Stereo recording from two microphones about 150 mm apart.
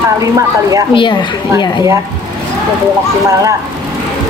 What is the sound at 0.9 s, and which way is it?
Speech, 35° left (ahead or behind).